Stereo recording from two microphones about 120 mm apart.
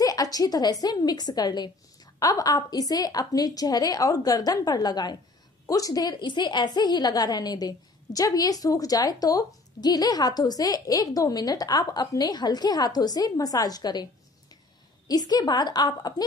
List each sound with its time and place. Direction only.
0.0 s a woman's voice: 30° left (ahead or behind)
15.0 s a woman's voice: 35° left (ahead or behind)